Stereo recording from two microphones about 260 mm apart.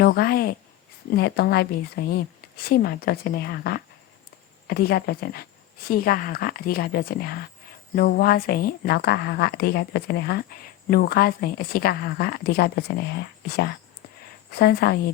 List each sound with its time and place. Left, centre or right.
0.0 s a woman's voice: left